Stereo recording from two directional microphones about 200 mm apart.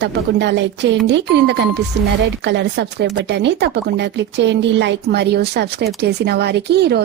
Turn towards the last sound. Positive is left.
turn(degrees=-55)  # may be behind; listen again after turning